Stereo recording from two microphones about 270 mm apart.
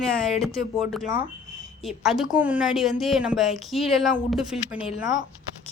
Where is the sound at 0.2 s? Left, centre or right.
Centre.